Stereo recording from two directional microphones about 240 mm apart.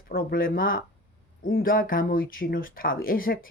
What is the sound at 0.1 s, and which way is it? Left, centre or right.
Speech, left.